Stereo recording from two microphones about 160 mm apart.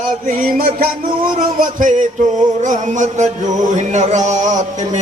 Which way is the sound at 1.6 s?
55° right (ahead or behind).